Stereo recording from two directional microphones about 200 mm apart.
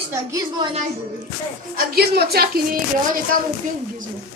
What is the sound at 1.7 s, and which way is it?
Speech, 50° right (ahead or behind).